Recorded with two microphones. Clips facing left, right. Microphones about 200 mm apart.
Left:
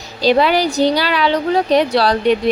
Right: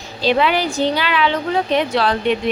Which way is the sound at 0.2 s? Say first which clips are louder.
Left 3 dB; 40° left (ahead or behind).